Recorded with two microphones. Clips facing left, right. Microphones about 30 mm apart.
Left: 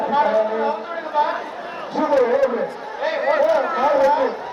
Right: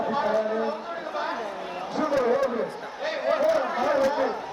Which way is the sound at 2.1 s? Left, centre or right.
Left.